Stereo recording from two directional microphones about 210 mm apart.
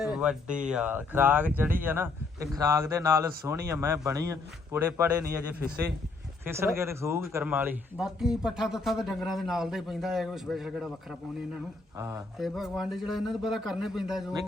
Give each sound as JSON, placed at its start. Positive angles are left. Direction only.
{"t": 0.0, "sound": "speech", "side_deg": -5}
{"t": 6.4, "sound": "speech", "side_deg": -10}
{"t": 11.9, "sound": "speech", "side_deg": -15}
{"t": 12.4, "sound": "speech", "side_deg": 0}